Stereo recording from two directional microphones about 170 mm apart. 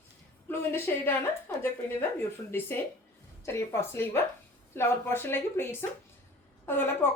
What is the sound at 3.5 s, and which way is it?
A woman's voice, 15° left (ahead or behind).